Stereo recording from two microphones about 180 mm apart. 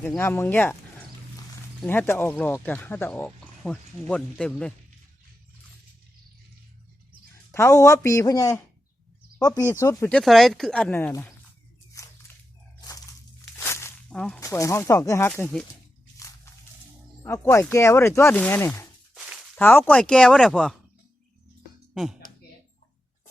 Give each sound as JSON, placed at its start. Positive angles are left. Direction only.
{"t": 0.2, "sound": "speech", "side_deg": 10}
{"t": 1.8, "sound": "speech", "side_deg": 10}
{"t": 7.5, "sound": "speech", "side_deg": 15}
{"t": 9.6, "sound": "speech", "side_deg": 15}
{"t": 10.2, "sound": "speech", "side_deg": 0}
{"t": 12.0, "sound": "squish", "side_deg": 15}
{"t": 13.4, "sound": "a sound", "side_deg": 15}
{"t": 14.2, "sound": "speech", "side_deg": 5}
{"t": 14.4, "sound": "speech", "side_deg": 15}
{"t": 17.2, "sound": "speech", "side_deg": 15}
{"t": 19.1, "sound": "a sound", "side_deg": -5}
{"t": 19.5, "sound": "speech", "side_deg": 10}